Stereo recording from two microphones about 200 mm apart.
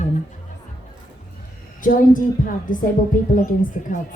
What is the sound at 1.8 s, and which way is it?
A woman's voice, 40° left (ahead or behind).